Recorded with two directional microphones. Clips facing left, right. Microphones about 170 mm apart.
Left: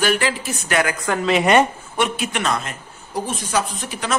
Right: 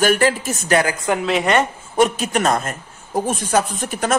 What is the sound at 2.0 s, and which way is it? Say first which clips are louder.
Speech: right 5 dB; 40° right (ahead or behind).